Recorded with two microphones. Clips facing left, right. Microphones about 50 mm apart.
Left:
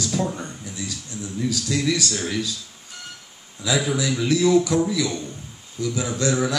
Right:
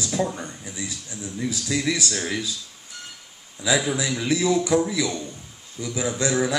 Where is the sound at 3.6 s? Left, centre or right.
Centre.